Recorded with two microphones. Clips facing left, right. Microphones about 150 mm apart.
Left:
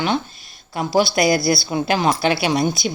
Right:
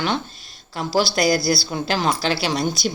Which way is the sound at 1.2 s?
55° left (ahead or behind).